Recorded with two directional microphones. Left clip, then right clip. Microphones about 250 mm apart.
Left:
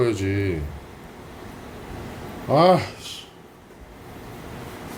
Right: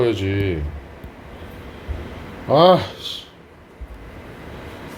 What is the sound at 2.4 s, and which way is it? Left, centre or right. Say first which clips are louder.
Speech: right 4 dB; centre.